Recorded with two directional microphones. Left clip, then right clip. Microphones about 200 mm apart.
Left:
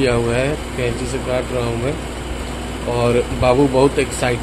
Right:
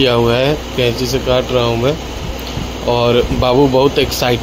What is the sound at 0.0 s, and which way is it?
Speech, 25° right (ahead or behind).